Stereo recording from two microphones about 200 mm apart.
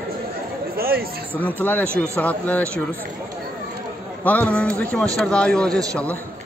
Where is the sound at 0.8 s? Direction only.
50° right (ahead or behind).